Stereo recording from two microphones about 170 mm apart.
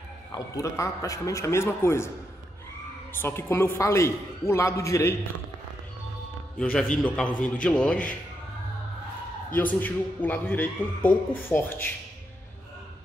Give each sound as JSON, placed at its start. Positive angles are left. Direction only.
{"t": 0.3, "sound": "a man's voice", "side_deg": 20}
{"t": 3.2, "sound": "a man's voice", "side_deg": 15}
{"t": 6.6, "sound": "a man's voice", "side_deg": 10}
{"t": 9.5, "sound": "a man's voice", "side_deg": 10}